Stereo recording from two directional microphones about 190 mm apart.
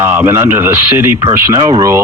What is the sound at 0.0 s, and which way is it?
Speech, 10° right (ahead or behind).